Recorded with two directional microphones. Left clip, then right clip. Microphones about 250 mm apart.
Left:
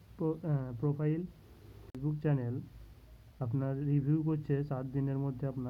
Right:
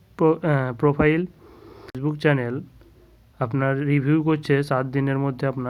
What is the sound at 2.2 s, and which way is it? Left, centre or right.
Speech, right.